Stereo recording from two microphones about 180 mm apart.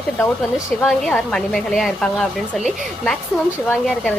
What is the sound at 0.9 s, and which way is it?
Speech, 5° left (ahead or behind).